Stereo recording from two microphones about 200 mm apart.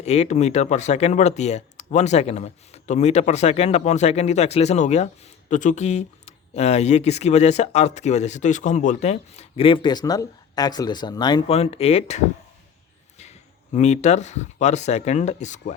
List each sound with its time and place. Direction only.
0.0 s speech: 35° left (ahead or behind)
13.7 s speech: 35° left (ahead or behind)